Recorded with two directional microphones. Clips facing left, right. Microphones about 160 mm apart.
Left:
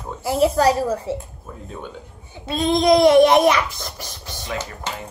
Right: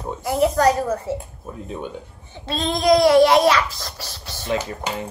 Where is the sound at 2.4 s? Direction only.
15° left (ahead or behind).